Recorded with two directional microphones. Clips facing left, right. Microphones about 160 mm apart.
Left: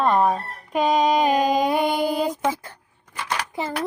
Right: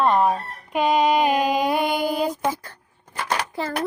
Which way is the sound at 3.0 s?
45° right (ahead or behind).